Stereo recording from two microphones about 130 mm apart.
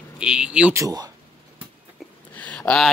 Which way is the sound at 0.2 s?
5° right (ahead or behind).